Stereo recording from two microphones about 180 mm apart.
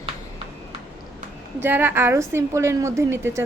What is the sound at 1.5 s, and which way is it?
A woman's voice, 10° right (ahead or behind).